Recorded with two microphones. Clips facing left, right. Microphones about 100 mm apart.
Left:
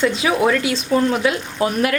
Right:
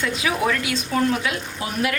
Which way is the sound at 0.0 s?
30° left (ahead or behind).